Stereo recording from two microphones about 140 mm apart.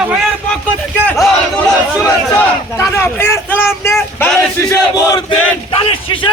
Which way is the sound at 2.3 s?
20° left (ahead or behind).